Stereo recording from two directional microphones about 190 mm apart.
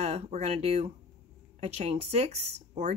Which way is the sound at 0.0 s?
35° right (ahead or behind).